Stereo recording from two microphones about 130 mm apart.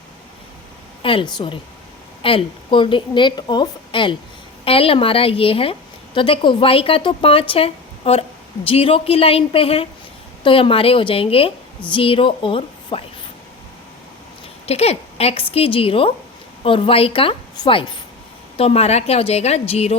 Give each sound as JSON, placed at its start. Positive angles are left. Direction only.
{"t": 1.0, "sound": "a woman's voice", "side_deg": 40}
{"t": 14.7, "sound": "a woman's voice", "side_deg": 50}
{"t": 18.5, "sound": "a woman's voice", "side_deg": 50}